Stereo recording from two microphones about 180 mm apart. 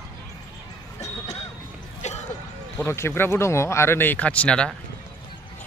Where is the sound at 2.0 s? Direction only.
40° left (ahead or behind).